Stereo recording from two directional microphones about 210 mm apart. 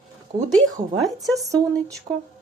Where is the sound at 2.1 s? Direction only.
25° right (ahead or behind).